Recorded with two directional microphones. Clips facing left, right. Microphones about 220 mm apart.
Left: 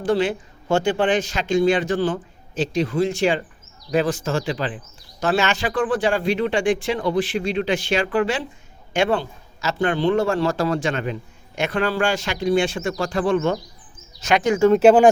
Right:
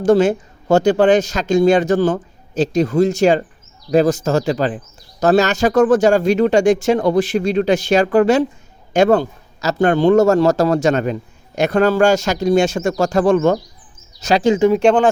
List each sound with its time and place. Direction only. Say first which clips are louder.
0.0 s a man's voice: right 7 dB; 45° right (ahead or behind); by 14.7 s 25° right (ahead or behind)
14.7 s speech: left 1 dB; 5° left (ahead or behind)